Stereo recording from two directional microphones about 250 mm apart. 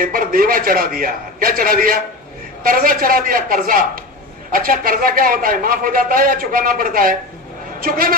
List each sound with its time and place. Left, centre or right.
0.0 s a man's voice: right